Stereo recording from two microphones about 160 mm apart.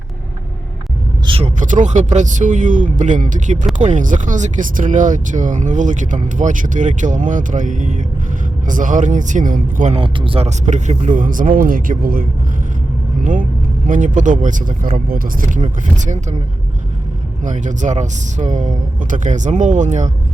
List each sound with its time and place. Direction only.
1.3 s speech: 40° right (ahead or behind)
9.9 s speech: 35° right (ahead or behind); by 12.2 s 60° right (ahead or behind)
13.2 s speech: 55° right (ahead or behind)
15.6 s speech: 50° right (ahead or behind)
17.4 s speech: 50° right (ahead or behind)